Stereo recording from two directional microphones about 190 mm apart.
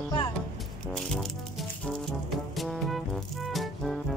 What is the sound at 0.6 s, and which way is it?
Music, centre (ahead or behind).